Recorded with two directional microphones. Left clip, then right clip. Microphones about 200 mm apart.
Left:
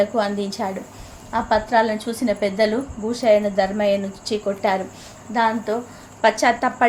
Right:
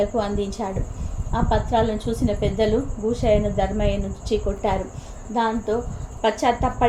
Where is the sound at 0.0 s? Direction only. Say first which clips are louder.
Left 2 dB; 65° left (ahead or behind).